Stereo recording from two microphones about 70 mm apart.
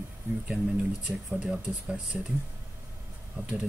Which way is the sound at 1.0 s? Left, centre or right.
Centre.